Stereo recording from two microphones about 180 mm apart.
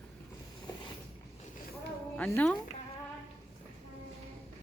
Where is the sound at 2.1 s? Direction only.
10° left (ahead or behind).